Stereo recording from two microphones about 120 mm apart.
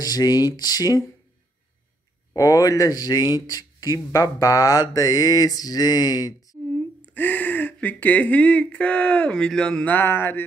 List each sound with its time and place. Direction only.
0.0 s speech: 30° left (ahead or behind)
2.3 s speech: 30° left (ahead or behind)
7.2 s speech: 15° left (ahead or behind)